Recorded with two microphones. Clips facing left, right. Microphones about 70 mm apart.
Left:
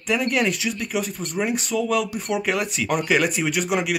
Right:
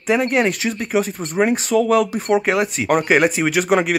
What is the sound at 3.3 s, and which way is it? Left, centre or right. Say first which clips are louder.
Speech: right 6 dB; right.